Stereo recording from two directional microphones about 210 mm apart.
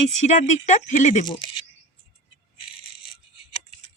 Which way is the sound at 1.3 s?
20° left (ahead or behind).